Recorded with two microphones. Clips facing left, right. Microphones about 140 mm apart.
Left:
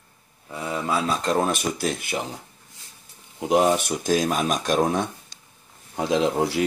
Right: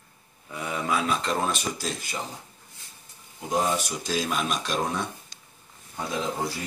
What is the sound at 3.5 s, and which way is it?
Speech, 65° left (ahead or behind).